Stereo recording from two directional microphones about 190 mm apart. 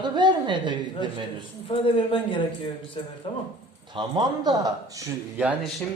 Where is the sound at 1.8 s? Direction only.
25° left (ahead or behind).